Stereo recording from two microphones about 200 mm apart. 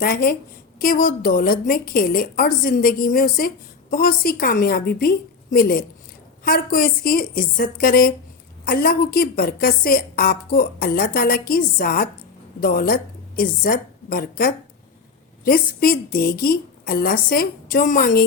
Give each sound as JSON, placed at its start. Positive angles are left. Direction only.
{"t": 0.0, "sound": "a woman's voice", "side_deg": 45}